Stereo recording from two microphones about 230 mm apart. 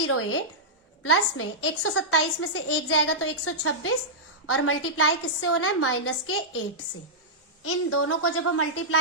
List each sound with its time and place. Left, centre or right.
0.0 s a woman's voice: left
7.6 s a woman's voice: left